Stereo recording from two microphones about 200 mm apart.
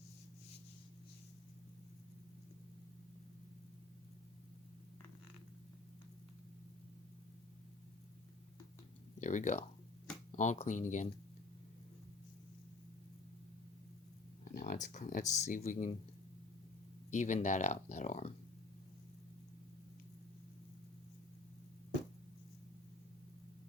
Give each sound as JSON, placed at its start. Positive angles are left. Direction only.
{"t": 9.2, "sound": "speech", "side_deg": 35}
{"t": 14.5, "sound": "speech", "side_deg": 45}
{"t": 17.1, "sound": "speech", "side_deg": 35}